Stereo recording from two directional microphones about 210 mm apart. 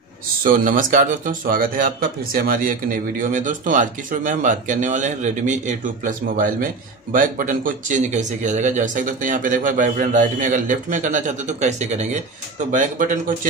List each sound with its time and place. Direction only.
0.4 s speech: 40° right (ahead or behind)